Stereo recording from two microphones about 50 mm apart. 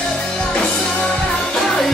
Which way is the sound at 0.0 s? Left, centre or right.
Centre.